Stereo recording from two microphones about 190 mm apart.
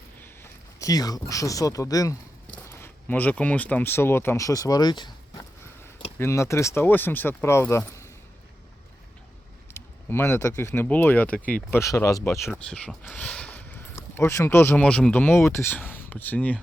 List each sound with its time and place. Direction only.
0.2 s speech: 15° left (ahead or behind)
9.7 s speech: 10° left (ahead or behind)
12.5 s speech: 5° left (ahead or behind)